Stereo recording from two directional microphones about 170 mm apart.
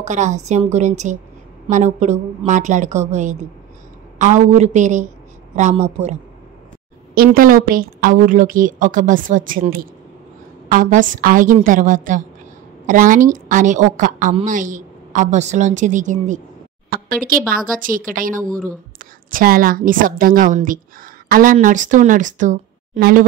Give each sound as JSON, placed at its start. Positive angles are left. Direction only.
{"t": 0.0, "sound": "a woman's voice", "side_deg": -45}
{"t": 7.3, "sound": "a woman's voice", "side_deg": -55}
{"t": 16.9, "sound": "a woman's voice", "side_deg": -60}